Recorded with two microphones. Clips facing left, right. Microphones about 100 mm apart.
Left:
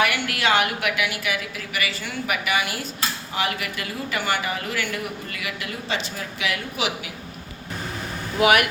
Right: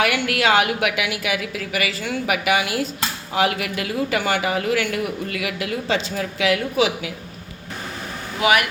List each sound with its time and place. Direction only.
0.0 s a man's voice: 90° right
8.4 s speech: 50° left (ahead or behind)